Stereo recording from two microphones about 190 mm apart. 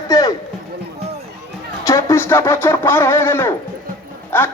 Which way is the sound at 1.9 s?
15° left (ahead or behind).